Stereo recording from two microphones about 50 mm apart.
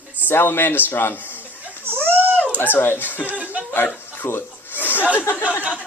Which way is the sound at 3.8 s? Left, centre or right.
Left.